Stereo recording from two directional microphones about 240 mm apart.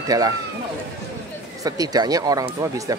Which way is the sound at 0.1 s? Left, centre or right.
Centre.